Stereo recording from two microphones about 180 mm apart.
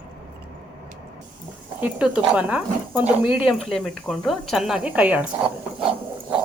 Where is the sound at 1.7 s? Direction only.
10° right (ahead or behind).